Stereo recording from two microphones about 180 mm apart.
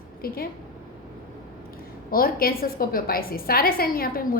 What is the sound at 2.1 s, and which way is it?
A woman's voice, 55° left (ahead or behind).